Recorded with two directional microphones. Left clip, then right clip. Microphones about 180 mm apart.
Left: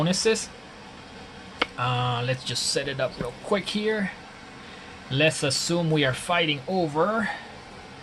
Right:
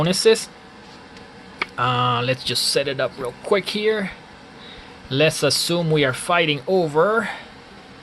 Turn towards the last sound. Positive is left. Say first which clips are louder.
# right 6 dB
turn(degrees=-45)  # may be behind; listen again after turning